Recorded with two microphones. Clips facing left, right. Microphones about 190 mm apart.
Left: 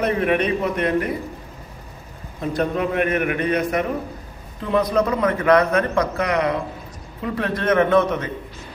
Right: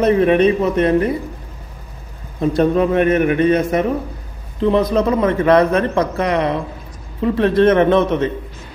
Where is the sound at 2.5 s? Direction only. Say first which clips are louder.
Right 6 dB; 30° right (ahead or behind).